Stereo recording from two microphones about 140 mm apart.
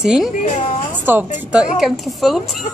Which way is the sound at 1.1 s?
15° right (ahead or behind).